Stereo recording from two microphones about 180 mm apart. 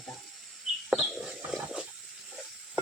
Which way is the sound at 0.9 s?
Centre (ahead or behind).